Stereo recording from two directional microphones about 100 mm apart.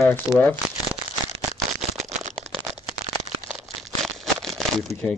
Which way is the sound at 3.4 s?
5° right (ahead or behind).